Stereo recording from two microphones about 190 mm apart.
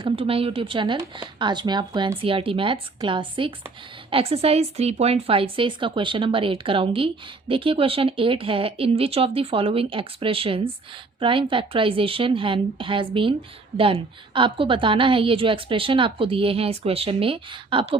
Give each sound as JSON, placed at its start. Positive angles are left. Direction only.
{"t": 0.0, "sound": "a woman's voice", "side_deg": -30}